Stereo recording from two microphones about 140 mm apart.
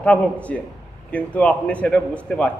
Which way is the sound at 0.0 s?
10° left (ahead or behind).